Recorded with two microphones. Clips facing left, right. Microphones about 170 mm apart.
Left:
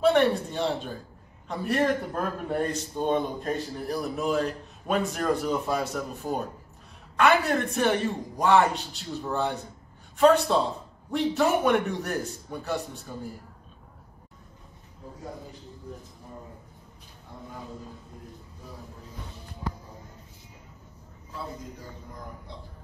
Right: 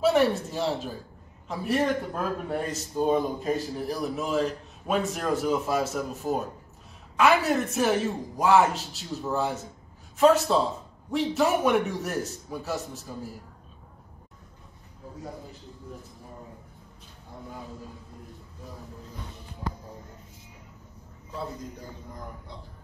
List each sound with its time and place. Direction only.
0.0 s a man's voice: 5° right (ahead or behind)